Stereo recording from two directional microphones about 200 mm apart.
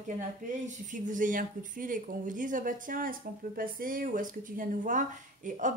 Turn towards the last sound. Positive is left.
turn(degrees=-40)  # may be behind; listen again after turning